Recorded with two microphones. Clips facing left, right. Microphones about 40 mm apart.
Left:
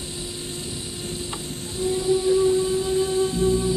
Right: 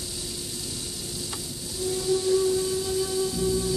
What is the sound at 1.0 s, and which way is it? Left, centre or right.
Music, left.